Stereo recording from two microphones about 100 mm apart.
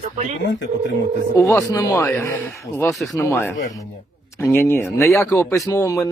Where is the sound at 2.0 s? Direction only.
20° left (ahead or behind).